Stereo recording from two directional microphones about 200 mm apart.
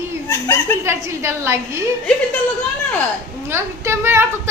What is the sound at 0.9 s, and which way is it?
Speech, 15° right (ahead or behind).